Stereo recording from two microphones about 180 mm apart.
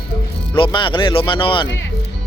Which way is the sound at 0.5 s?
25° left (ahead or behind).